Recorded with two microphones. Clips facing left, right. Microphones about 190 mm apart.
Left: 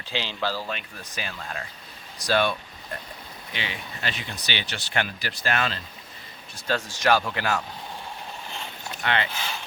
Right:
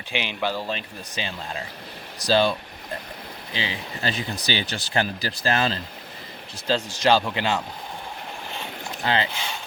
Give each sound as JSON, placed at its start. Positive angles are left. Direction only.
{"t": 0.1, "sound": "speech", "side_deg": -15}
{"t": 9.0, "sound": "speech", "side_deg": -30}